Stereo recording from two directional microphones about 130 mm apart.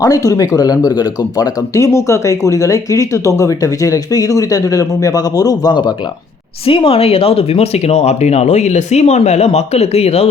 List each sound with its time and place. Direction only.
0.0 s speech: 30° left (ahead or behind)
6.7 s speech: 45° left (ahead or behind)